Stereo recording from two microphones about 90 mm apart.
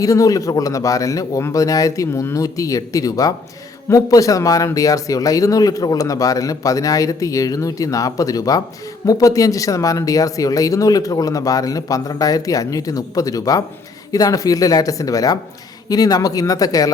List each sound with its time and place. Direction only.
0.0 s speech: 40° left (ahead or behind)